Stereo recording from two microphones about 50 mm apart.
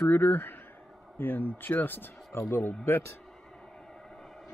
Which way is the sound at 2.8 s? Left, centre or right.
Left.